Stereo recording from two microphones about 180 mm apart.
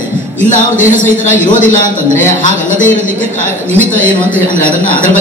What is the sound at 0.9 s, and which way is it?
Speech, 45° left (ahead or behind).